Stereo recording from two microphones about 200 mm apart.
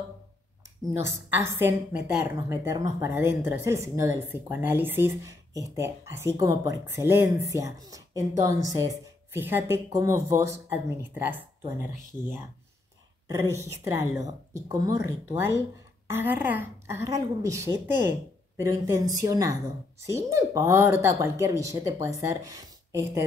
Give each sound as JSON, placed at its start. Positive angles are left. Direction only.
{"t": 0.9, "sound": "speech", "side_deg": -15}
{"t": 13.3, "sound": "speech", "side_deg": -15}